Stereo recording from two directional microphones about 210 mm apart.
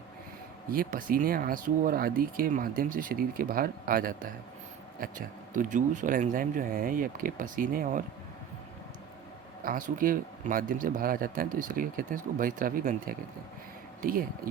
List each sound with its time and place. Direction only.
0.7 s speech: 40° right (ahead or behind)
9.6 s speech: 40° right (ahead or behind)